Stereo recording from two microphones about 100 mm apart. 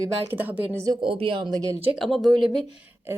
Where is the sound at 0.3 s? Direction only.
20° right (ahead or behind).